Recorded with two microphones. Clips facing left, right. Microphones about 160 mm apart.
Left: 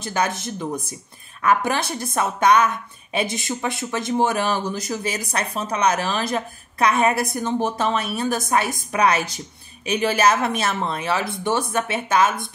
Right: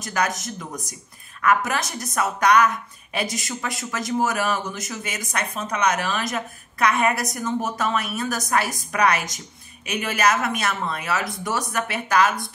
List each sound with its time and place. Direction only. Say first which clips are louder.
0.0 s a woman's voice: left 1 dB; 30° left (ahead or behind)